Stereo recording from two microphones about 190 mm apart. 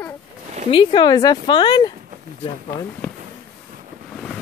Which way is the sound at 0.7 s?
25° left (ahead or behind).